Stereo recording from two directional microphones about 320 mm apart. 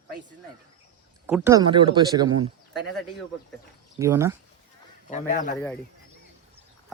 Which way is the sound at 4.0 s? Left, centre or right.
Centre.